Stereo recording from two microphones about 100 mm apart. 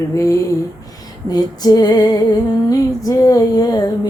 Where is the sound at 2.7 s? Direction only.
35° left (ahead or behind).